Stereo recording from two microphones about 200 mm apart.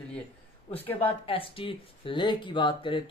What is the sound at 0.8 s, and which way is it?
Speech, 10° left (ahead or behind).